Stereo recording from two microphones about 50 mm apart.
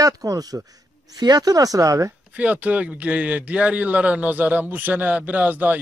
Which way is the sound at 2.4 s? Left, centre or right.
Right.